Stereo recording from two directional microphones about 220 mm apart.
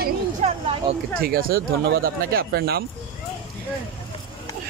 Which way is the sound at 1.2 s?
40° right (ahead or behind).